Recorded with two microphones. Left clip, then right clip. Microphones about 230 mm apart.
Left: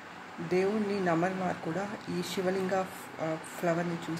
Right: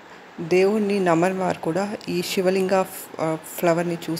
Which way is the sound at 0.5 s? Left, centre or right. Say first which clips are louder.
Right 10 dB; right.